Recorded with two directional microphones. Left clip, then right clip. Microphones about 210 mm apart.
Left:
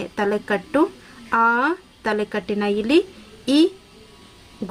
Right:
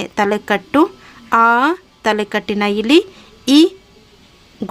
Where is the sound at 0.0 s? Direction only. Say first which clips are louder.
Right 6 dB; 40° right (ahead or behind).